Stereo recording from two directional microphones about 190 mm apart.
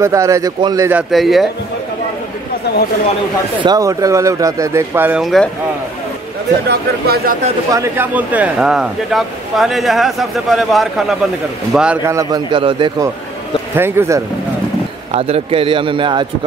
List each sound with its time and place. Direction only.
0.0 s speech: 15° right (ahead or behind)
0.9 s speech: centre (ahead or behind)
3.6 s speech: 20° right (ahead or behind); by 5.5 s centre (ahead or behind)
6.7 s speech: 55° right (ahead or behind)
7.7 s speech: 15° right (ahead or behind)
13.7 s speech: 10° right (ahead or behind)
15.0 s a man's voice: 30° right (ahead or behind)